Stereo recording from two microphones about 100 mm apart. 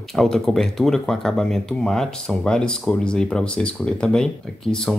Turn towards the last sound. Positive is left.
turn(degrees=10)  # may be behind; listen again after turning